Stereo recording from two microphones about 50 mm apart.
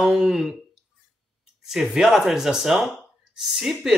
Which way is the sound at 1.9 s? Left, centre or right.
Centre.